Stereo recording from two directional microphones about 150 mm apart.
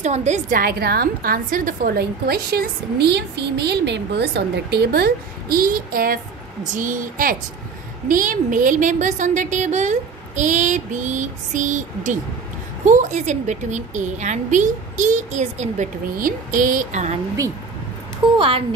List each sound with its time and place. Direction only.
0.0 s a woman's voice: 50° right (ahead or behind)
0.6 s a woman's voice: 90° right; by 17.2 s 50° right (ahead or behind)